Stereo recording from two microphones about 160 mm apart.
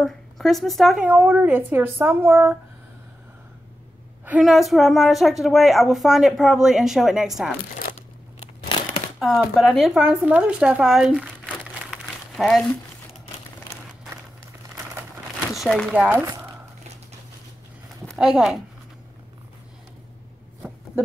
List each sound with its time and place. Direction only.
0.0 s a woman's voice: centre (ahead or behind)
1.0 s speech: 10° right (ahead or behind)
4.3 s a woman's voice: centre (ahead or behind)
9.2 s speech: centre (ahead or behind)
15.5 s speech: centre (ahead or behind)
18.0 s speech: centre (ahead or behind)